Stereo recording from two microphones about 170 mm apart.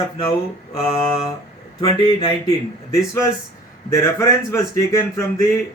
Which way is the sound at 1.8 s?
30° left (ahead or behind).